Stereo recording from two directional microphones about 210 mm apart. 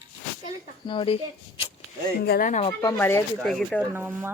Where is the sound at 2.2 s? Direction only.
50° left (ahead or behind).